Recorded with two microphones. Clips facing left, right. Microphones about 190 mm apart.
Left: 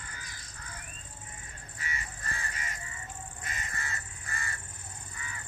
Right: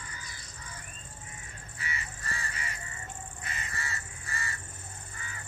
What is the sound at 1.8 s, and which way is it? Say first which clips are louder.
Crow: right 1 dB; 45° left (ahead or behind).